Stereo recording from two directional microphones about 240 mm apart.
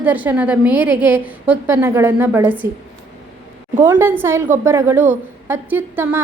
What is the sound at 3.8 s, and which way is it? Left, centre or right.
Speech, centre.